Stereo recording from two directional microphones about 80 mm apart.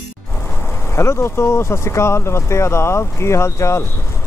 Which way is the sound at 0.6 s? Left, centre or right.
Left.